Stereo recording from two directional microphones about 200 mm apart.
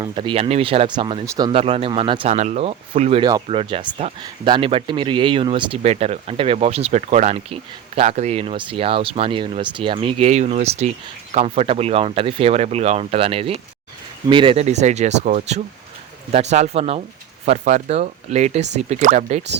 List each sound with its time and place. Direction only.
0.0 s speech: 25° right (ahead or behind)
1.5 s speech: 30° right (ahead or behind)